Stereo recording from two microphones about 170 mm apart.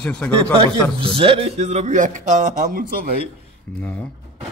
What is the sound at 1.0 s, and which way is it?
A man's voice, 30° right (ahead or behind).